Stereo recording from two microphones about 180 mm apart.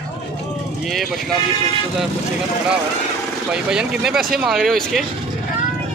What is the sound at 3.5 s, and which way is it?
Speech, 5° right (ahead or behind).